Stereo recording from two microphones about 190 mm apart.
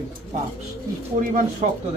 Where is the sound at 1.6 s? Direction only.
35° right (ahead or behind).